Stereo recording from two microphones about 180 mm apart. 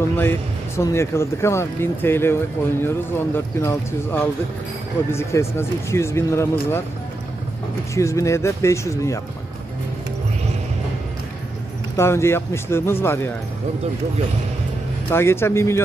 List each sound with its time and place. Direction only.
0.2 s speech: 15° left (ahead or behind)
7.9 s speech: 15° left (ahead or behind)
12.0 s speech: 15° left (ahead or behind)
15.0 s speech: 15° left (ahead or behind)